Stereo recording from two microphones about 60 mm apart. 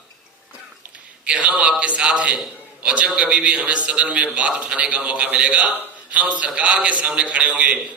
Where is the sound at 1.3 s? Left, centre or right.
Centre.